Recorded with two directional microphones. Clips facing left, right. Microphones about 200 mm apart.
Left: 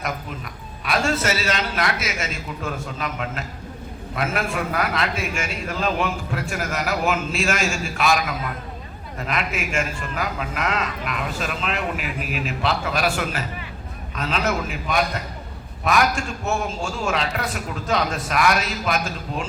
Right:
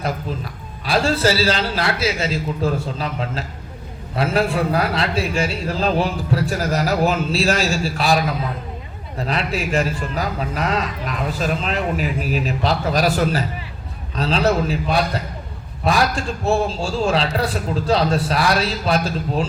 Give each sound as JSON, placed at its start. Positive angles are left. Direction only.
{"t": 0.9, "sound": "a man's voice", "side_deg": -30}